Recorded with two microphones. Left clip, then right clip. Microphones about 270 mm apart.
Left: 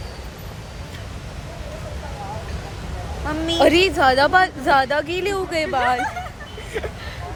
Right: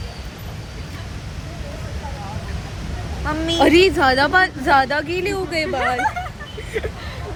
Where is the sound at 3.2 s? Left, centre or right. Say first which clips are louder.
Right 2 dB; right.